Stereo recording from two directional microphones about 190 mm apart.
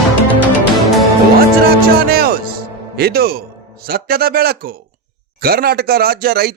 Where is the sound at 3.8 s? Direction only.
55° right (ahead or behind).